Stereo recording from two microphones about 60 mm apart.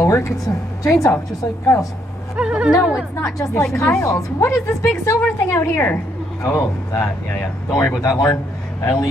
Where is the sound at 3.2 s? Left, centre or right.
Left.